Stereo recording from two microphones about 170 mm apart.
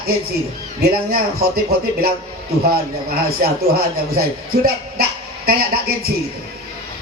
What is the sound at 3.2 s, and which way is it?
Speech, 65° right (ahead or behind).